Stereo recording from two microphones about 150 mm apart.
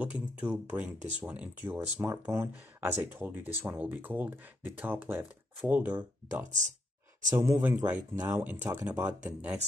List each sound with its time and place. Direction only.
0.0 s speech: 10° right (ahead or behind)
7.2 s speech: 20° right (ahead or behind)